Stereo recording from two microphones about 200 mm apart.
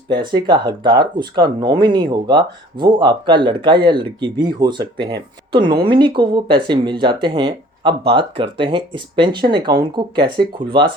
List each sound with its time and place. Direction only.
0.1 s speech: 20° right (ahead or behind)